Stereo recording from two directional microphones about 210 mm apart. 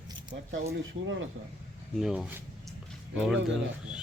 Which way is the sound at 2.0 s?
Centre (ahead or behind).